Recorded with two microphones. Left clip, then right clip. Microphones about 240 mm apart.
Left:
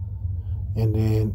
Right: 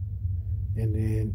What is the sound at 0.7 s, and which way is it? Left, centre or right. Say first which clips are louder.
Speech: left 7 dB; centre.